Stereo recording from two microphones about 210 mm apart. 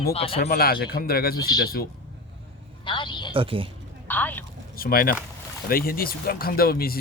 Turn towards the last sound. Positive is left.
turn(degrees=45)  # may be behind; listen again after turning